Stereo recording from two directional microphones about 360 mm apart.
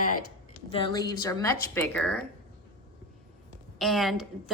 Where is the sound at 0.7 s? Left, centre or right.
Centre.